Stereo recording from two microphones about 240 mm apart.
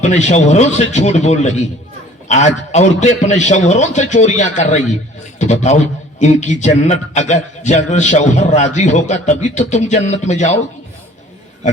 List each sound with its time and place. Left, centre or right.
0.0 s a man's voice: left